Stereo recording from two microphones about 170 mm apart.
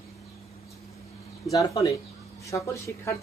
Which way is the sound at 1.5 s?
20° left (ahead or behind).